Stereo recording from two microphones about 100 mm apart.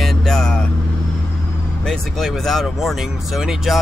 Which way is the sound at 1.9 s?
5° left (ahead or behind).